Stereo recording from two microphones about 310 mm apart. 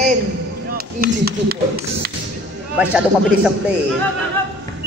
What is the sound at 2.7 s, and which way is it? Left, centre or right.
Speech, centre.